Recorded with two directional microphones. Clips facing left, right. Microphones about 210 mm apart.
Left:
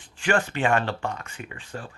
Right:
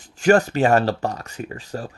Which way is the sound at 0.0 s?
40° right (ahead or behind).